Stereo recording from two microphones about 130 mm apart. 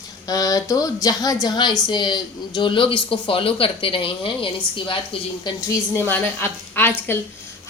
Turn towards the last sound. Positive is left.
turn(degrees=15)  # may be behind; listen again after turning